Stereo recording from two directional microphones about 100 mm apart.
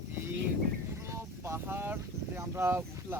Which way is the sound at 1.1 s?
30° right (ahead or behind).